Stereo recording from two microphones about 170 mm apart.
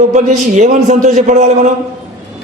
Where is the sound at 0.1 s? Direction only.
45° right (ahead or behind).